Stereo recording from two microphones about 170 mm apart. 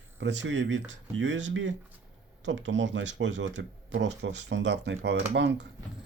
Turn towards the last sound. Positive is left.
turn(degrees=-90)